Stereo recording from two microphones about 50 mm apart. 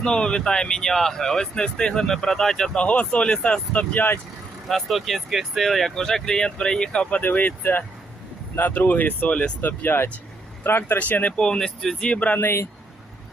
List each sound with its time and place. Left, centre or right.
0.0 s speech: centre
2.8 s speech: left
3.9 s speech: left
4.7 s speech: centre
7.2 s speech: left
10.6 s speech: left
10.9 s speech: left
11.3 s speech: centre
12.0 s speech: left